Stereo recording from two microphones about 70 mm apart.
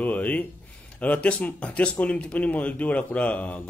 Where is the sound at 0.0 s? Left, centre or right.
Left.